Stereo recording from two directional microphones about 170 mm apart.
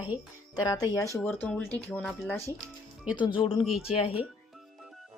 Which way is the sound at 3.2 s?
30° left (ahead or behind).